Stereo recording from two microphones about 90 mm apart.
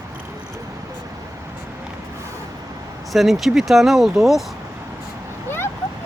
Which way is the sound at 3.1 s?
Centre (ahead or behind).